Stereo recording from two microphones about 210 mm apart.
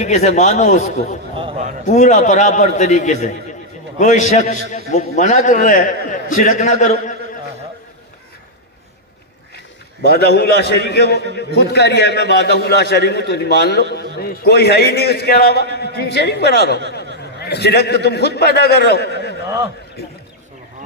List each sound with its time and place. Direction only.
0.0 s a man's voice: 35° left (ahead or behind)
10.0 s a man's voice: 50° left (ahead or behind)
19.1 s a sound: 50° left (ahead or behind)